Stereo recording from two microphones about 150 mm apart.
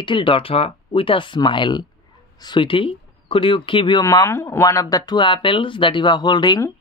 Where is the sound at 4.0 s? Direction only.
20° left (ahead or behind).